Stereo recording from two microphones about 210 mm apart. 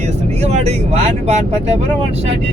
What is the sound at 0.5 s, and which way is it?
Speech, 30° right (ahead or behind).